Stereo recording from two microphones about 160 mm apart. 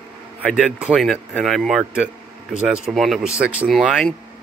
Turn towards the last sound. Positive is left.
turn(degrees=0)  # may be behind; listen again after turning